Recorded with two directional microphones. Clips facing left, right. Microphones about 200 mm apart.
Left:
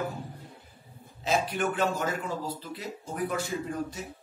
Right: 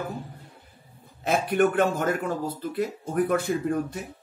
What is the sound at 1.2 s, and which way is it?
A man's voice, 55° right (ahead or behind).